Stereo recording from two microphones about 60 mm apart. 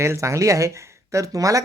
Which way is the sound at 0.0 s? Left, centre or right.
Right.